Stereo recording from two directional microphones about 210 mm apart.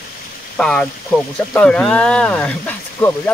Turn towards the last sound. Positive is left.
turn(degrees=5)  # may be behind; listen again after turning